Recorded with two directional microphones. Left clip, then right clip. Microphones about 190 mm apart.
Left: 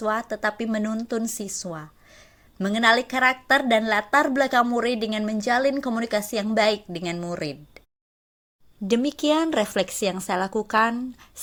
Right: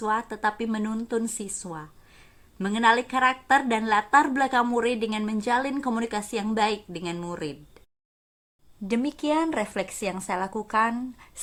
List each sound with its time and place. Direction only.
0.0 s a woman's voice: 15° left (ahead or behind)
8.9 s a woman's voice: 20° left (ahead or behind)